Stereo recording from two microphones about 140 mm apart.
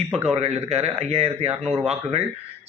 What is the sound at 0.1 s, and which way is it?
A man's voice, 45° right (ahead or behind).